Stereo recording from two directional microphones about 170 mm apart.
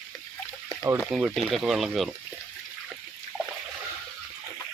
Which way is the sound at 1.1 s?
Centre (ahead or behind).